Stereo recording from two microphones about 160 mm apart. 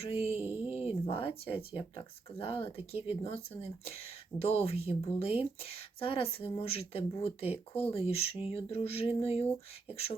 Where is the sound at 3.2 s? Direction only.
35° left (ahead or behind).